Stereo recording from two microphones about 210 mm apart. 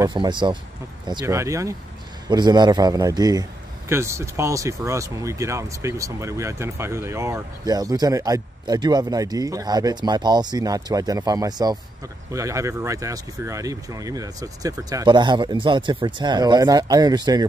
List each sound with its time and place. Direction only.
0.0 s a man's voice: 20° right (ahead or behind)